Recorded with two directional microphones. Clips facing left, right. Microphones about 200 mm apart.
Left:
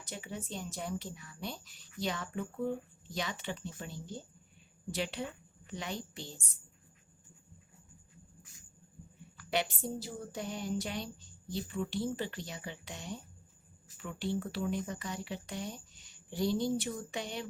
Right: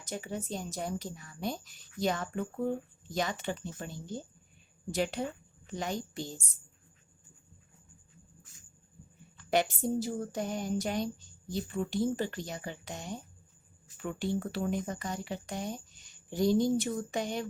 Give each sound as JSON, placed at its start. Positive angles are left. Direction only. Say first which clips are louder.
{"t": 0.0, "sound": "speech", "louder": "right 5 dB", "side_deg": -45}
{"t": 9.5, "sound": "speech", "louder": "right 6 dB", "side_deg": -45}